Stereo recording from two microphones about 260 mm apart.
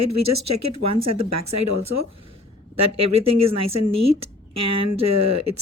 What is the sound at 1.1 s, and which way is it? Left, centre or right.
Speech, right.